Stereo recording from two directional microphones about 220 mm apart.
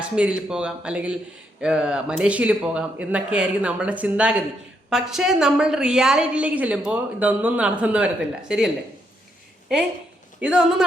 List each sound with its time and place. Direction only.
0.2 s a woman's voice: 5° right (ahead or behind)